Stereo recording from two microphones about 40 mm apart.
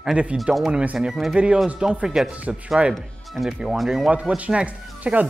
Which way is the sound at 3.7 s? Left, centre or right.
Centre.